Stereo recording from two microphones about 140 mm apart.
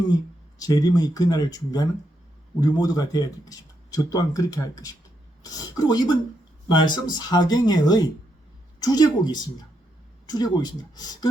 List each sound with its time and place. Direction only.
0.6 s a man's voice: 25° left (ahead or behind)